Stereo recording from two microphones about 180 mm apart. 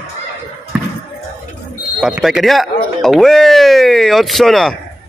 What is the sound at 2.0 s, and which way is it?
Speech, centre (ahead or behind).